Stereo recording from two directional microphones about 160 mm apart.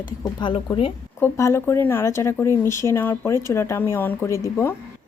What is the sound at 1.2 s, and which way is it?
Speech, 15° left (ahead or behind).